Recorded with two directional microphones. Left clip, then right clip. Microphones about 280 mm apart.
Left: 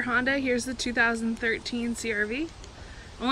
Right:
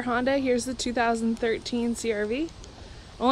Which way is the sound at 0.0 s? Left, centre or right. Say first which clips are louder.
Right 1 dB; centre.